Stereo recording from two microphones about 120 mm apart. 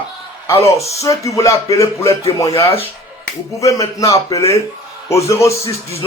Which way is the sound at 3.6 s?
25° left (ahead or behind).